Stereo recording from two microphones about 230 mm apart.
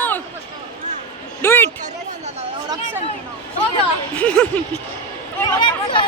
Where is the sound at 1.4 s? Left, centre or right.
Centre.